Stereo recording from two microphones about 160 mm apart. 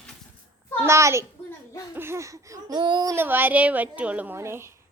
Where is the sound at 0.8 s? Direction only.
15° right (ahead or behind).